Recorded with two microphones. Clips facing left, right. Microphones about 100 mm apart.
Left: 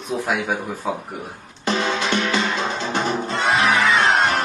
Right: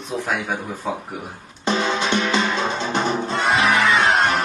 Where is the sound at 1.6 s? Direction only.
25° right (ahead or behind).